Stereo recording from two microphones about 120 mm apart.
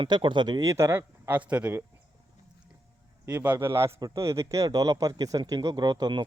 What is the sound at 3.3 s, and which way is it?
A man's voice, 15° right (ahead or behind).